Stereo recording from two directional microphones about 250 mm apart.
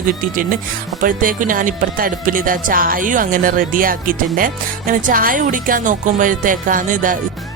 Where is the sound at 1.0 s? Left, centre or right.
Right.